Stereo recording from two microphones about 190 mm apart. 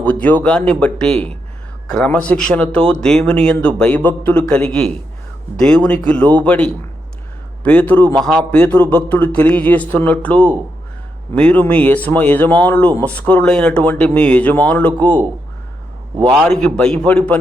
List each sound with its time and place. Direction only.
0.0 s a man's voice: 5° left (ahead or behind)
1.1 s speech: 30° right (ahead or behind)
1.9 s a man's voice: 5° left (ahead or behind)
16.2 s a man's voice: 5° left (ahead or behind)